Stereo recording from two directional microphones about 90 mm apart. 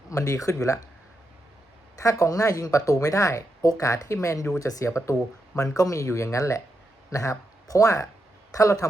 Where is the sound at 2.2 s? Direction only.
35° left (ahead or behind).